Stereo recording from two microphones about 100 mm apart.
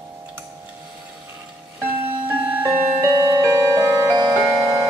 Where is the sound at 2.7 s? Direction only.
30° right (ahead or behind).